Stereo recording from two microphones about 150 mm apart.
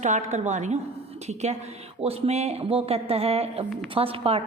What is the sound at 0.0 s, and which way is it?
A woman's voice, 50° right (ahead or behind).